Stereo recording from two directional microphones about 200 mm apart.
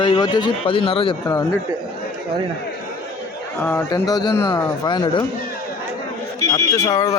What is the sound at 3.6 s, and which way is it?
A man's voice, 10° left (ahead or behind).